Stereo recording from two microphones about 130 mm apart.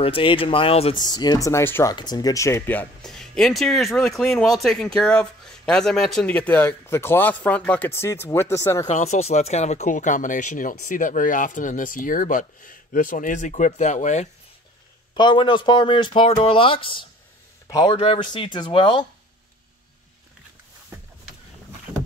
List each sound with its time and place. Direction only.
0.0 s speech: 40° left (ahead or behind)
0.9 s speech: 30° left (ahead or behind)
1.9 s speech: 30° left (ahead or behind)
8.8 s speech: 60° left (ahead or behind)
15.1 s speech: 35° left (ahead or behind)
17.6 s a man's voice: 30° left (ahead or behind)
17.9 s speech: 45° left (ahead or behind)